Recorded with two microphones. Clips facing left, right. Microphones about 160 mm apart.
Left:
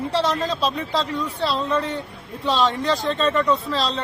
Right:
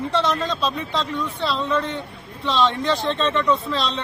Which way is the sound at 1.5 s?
35° left (ahead or behind).